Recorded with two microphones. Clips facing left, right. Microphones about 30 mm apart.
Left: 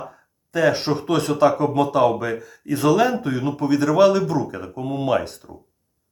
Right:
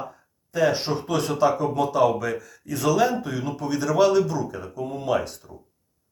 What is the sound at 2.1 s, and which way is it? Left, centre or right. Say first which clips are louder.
Speech: left 2 dB; left.